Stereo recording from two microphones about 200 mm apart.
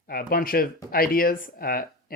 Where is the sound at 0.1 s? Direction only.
50° left (ahead or behind).